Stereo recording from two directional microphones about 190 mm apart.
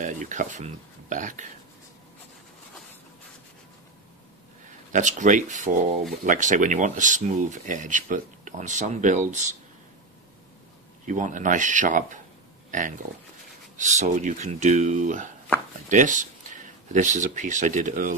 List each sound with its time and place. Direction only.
0.0 s speech: 40° right (ahead or behind)
4.9 s speech: 40° right (ahead or behind)
11.1 s speech: 40° right (ahead or behind)